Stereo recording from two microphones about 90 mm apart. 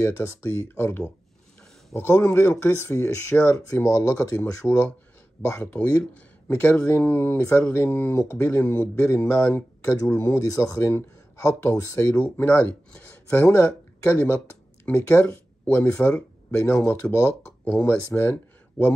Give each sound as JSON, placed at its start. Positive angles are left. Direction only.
{"t": 0.0, "sound": "speech", "side_deg": 30}
{"t": 9.1, "sound": "speech", "side_deg": 35}
{"t": 12.2, "sound": "speech", "side_deg": 25}
{"t": 18.8, "sound": "speech", "side_deg": 10}